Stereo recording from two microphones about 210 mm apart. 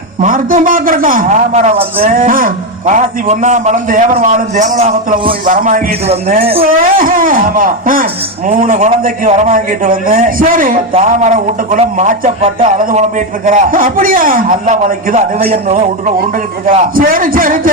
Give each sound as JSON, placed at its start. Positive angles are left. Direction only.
{"t": 0.2, "sound": "a man's voice", "side_deg": -40}
{"t": 2.0, "sound": "a man's voice", "side_deg": -40}
{"t": 6.4, "sound": "speech", "side_deg": -30}
{"t": 6.7, "sound": "a man's voice", "side_deg": -40}